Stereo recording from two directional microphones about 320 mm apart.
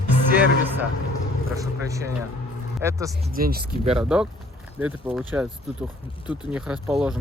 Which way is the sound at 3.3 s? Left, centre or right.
Right.